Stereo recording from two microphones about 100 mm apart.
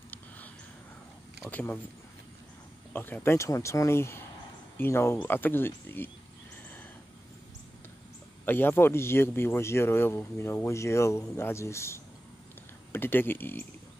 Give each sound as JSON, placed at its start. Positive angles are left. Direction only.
{"t": 1.5, "sound": "speech", "side_deg": 15}
{"t": 2.9, "sound": "speech", "side_deg": 20}
{"t": 8.5, "sound": "speech", "side_deg": 20}